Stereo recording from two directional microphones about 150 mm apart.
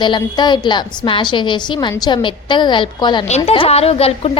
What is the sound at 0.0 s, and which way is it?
A woman's voice, 30° left (ahead or behind).